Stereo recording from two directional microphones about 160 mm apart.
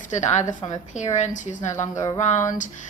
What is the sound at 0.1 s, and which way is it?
A woman's voice, 50° left (ahead or behind).